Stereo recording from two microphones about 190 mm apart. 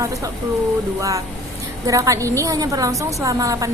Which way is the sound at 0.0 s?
15° right (ahead or behind).